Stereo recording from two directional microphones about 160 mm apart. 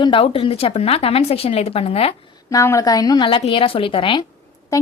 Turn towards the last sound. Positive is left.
turn(degrees=20)  # may be behind; listen again after turning